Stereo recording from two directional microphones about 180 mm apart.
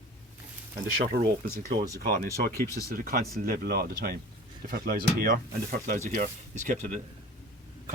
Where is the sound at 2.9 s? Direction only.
55° right (ahead or behind).